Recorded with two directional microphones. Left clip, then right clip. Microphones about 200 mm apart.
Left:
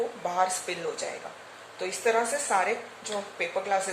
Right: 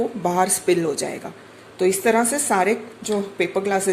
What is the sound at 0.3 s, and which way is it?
A woman's voice, 50° right (ahead or behind).